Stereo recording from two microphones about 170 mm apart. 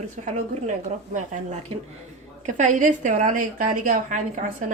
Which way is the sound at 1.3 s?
40° right (ahead or behind).